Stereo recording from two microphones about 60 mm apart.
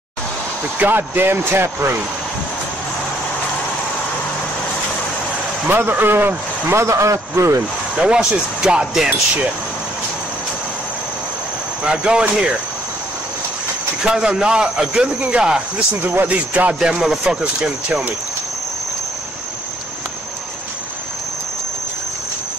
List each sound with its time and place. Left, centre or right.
0.7 s speech: right
5.7 s a man's voice: right
7.9 s speech: centre
11.8 s speech: centre
14.0 s a man's voice: centre
16.8 s speech: centre